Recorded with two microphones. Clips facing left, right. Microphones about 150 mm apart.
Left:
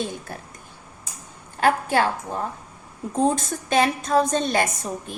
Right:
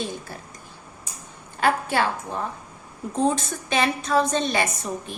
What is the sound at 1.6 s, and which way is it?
Speech, 45° left (ahead or behind).